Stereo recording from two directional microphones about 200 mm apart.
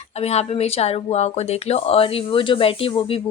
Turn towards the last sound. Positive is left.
turn(degrees=25)  # may be behind; listen again after turning